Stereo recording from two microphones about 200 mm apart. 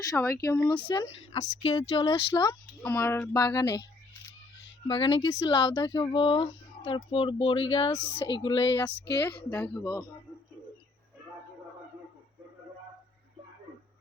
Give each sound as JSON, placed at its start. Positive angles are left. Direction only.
{"t": 0.0, "sound": "speech", "side_deg": 15}
{"t": 0.9, "sound": "speech", "side_deg": 20}
{"t": 2.8, "sound": "speech", "side_deg": 10}
{"t": 4.9, "sound": "speech", "side_deg": 25}
{"t": 8.1, "sound": "speech", "side_deg": 60}
{"t": 8.4, "sound": "speech", "side_deg": 25}
{"t": 9.0, "sound": "speech", "side_deg": 55}
{"t": 9.8, "sound": "speech", "side_deg": 20}